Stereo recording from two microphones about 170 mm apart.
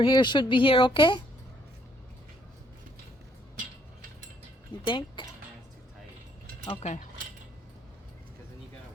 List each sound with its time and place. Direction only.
0.0 s a woman's voice: 25° left (ahead or behind)
4.9 s a woman's voice: 30° left (ahead or behind)
6.7 s speech: 40° left (ahead or behind)